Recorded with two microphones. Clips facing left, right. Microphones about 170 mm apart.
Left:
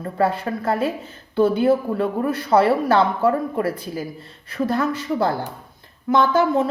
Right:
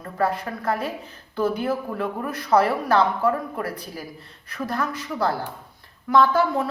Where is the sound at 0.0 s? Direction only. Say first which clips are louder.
Left 4 dB; 30° left (ahead or behind).